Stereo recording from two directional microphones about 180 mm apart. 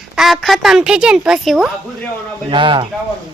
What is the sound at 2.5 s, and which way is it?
Speech, 25° right (ahead or behind).